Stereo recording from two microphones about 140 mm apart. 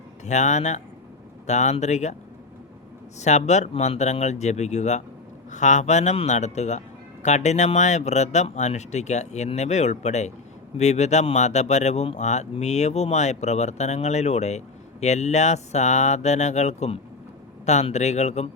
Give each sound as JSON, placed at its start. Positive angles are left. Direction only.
{"t": 0.3, "sound": "a man's voice", "side_deg": 55}
{"t": 3.2, "sound": "a man's voice", "side_deg": 55}